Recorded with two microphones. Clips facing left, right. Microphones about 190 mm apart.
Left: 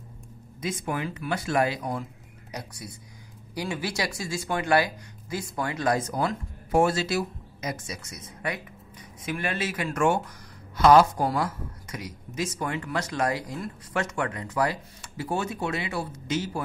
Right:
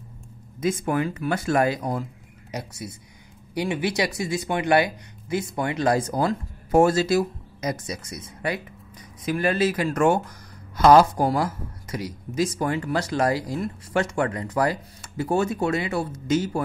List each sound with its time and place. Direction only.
0.6 s speech: 50° right (ahead or behind)
2.5 s a woman's voice: 25° right (ahead or behind); by 16.6 s 45° right (ahead or behind)